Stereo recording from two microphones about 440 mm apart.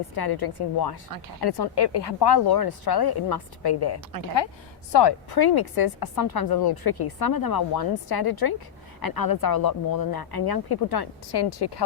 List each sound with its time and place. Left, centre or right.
0.2 s speech: left